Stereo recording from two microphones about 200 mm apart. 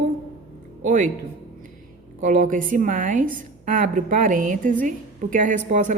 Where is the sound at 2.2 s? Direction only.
40° right (ahead or behind).